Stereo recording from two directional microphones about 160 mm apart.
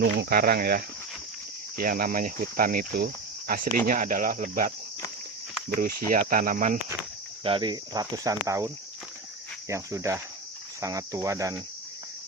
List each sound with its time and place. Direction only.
0.0 s speech: 80° right
1.7 s cricket: 60° right (ahead or behind)
5.7 s cricket: 70° right (ahead or behind); by 6.7 s 55° right (ahead or behind)
7.4 s cricket: 30° right (ahead or behind)